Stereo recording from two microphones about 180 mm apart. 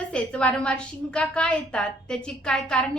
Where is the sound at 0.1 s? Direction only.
5° left (ahead or behind).